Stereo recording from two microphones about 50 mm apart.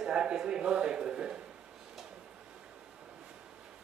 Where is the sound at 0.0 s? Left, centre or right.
Centre.